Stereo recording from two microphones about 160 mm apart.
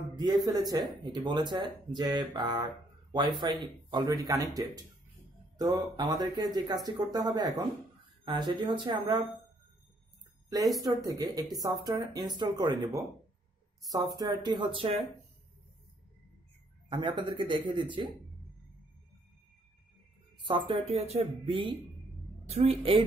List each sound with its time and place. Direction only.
0.2 s speech: 25° right (ahead or behind)
11.1 s speech: 20° right (ahead or behind)
16.9 s speech: 30° right (ahead or behind)
20.4 s speech: 30° right (ahead or behind)